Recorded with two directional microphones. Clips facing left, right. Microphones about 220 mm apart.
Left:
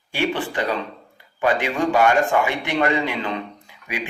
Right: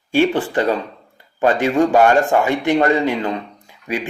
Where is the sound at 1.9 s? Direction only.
45° right (ahead or behind).